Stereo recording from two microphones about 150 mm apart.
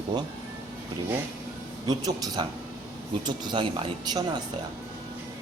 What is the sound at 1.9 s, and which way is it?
Speech, 25° right (ahead or behind).